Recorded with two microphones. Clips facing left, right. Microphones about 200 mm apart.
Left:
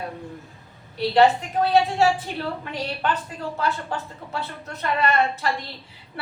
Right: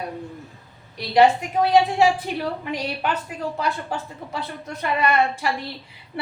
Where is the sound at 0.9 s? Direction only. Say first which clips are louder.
Right 1 dB; 15° right (ahead or behind).